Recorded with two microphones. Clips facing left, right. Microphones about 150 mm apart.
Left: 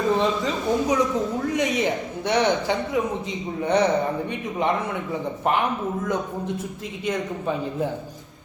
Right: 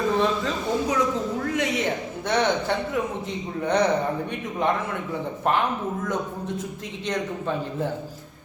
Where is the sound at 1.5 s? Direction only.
20° left (ahead or behind).